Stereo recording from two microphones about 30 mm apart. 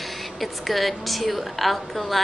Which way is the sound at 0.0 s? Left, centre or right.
Centre.